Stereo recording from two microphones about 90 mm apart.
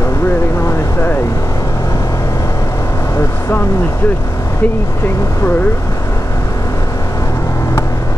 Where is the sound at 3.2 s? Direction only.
30° left (ahead or behind).